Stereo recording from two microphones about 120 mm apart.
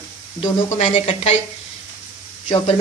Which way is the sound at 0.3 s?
50° left (ahead or behind).